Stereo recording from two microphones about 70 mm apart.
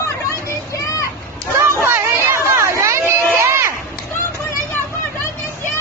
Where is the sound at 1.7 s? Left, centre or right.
Right.